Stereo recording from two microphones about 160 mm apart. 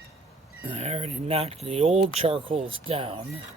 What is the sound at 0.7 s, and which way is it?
Speech, 40° right (ahead or behind).